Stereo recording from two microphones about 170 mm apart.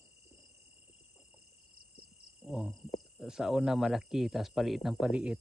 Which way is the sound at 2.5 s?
5° right (ahead or behind).